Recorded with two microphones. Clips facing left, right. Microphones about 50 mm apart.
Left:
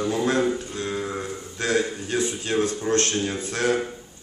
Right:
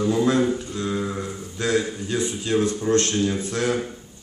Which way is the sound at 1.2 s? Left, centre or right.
Left.